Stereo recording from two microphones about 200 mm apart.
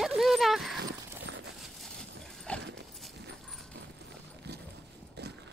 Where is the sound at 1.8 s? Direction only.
5° left (ahead or behind).